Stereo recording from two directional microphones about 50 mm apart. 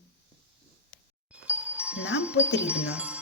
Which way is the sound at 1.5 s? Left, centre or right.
Right.